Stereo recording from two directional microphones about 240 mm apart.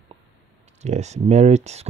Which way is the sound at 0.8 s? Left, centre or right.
Right.